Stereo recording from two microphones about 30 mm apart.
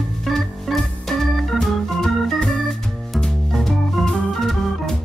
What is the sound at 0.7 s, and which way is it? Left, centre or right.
Organ, centre.